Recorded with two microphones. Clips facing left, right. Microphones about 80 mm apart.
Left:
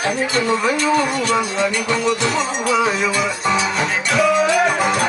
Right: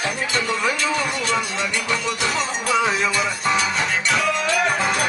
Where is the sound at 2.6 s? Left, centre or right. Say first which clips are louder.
Left 3 dB; left.